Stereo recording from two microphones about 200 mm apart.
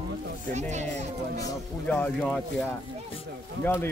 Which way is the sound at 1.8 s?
5° left (ahead or behind).